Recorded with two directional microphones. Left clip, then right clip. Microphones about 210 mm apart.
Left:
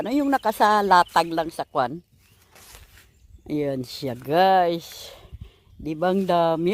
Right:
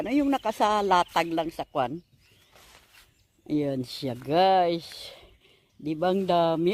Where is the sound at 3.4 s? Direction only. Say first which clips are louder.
Left 2 dB; 25° left (ahead or behind).